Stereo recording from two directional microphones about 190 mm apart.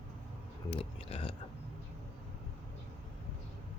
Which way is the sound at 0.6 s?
30° left (ahead or behind).